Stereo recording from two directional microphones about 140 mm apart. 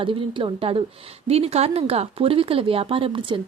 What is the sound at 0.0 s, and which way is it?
Speech, 35° right (ahead or behind).